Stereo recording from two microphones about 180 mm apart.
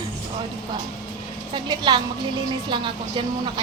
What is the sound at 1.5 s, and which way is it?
A woman's voice, 25° right (ahead or behind).